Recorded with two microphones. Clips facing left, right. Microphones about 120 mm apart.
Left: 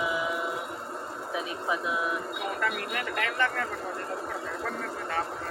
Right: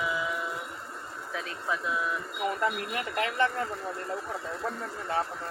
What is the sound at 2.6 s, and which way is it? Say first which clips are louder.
Speech: right 1 dB; 25° right (ahead or behind).